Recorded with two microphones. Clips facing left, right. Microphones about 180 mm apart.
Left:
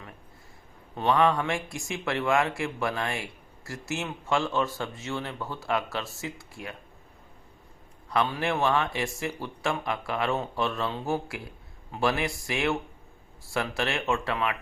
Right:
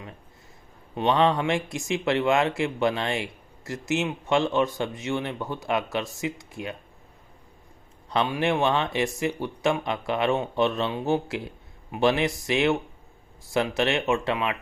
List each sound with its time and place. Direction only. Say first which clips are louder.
0.9 s speech: right 2 dB; 25° right (ahead or behind)
8.1 s speech: right 3 dB; 20° right (ahead or behind)